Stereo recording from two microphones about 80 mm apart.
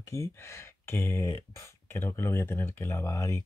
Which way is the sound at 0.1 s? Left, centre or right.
Left.